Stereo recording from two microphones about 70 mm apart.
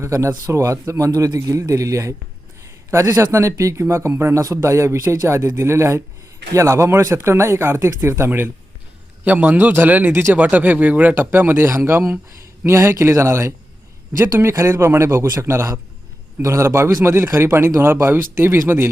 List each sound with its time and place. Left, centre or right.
0.0 s speech: right
9.2 s a man's voice: right
10.3 s a man's voice: right